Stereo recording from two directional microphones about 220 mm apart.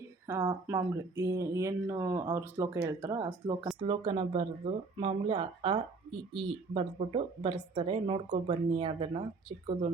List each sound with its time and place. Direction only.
0.3 s speech: 10° right (ahead or behind)